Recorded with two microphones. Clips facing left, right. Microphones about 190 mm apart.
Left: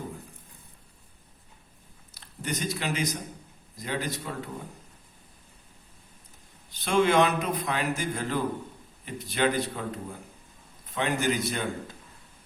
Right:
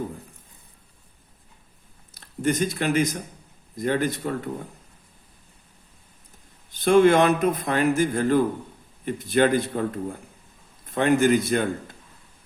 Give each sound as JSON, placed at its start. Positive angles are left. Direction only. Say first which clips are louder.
{"t": 2.1, "sound": "speech", "louder": "right 10 dB", "side_deg": -50}
{"t": 6.8, "sound": "speech", "louder": "right 6 dB", "side_deg": -50}